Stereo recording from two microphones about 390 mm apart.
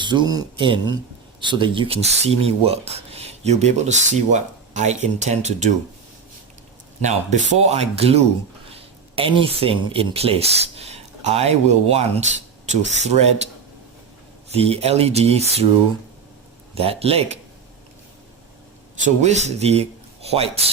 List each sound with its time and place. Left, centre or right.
0.0 s speech: centre
7.0 s speech: centre
14.5 s speech: centre
16.7 s speech: centre
19.0 s speech: centre